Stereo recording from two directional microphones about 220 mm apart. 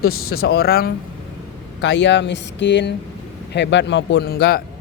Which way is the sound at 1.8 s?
55° left (ahead or behind).